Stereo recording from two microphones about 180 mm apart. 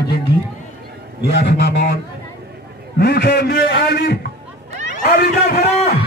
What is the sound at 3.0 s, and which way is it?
A man's voice, 60° left (ahead or behind).